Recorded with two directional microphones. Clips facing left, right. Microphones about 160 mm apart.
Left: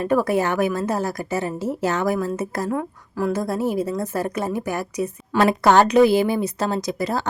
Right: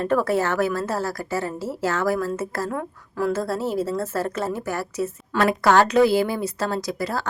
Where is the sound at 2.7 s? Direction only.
5° left (ahead or behind).